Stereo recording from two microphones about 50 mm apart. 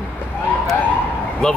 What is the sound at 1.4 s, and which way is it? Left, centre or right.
Speech, centre.